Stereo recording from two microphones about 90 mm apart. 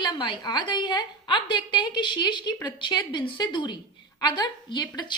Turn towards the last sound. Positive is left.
turn(degrees=55)  # may be behind; listen again after turning